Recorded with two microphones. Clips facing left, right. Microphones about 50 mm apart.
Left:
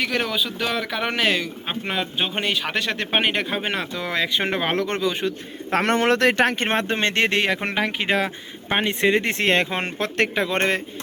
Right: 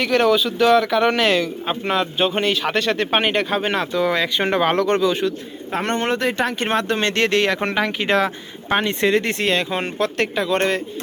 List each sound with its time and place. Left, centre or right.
0.0 s speech: centre
5.7 s speech: left
6.3 s speech: left
6.7 s speech: left
9.4 s speech: left